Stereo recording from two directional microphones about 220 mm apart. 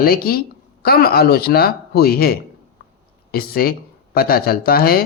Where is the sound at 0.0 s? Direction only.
45° left (ahead or behind).